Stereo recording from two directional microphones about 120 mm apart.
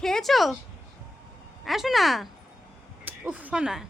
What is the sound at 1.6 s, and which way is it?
Speech, centre (ahead or behind).